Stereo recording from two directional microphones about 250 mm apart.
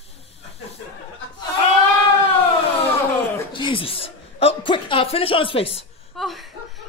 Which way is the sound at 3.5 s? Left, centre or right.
Centre.